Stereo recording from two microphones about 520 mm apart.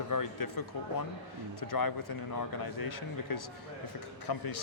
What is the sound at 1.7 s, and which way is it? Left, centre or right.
A man's voice, left.